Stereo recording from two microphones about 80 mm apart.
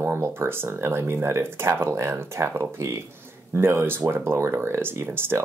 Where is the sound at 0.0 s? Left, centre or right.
Right.